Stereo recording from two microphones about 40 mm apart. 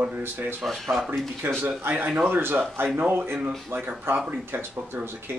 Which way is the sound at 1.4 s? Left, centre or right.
Right.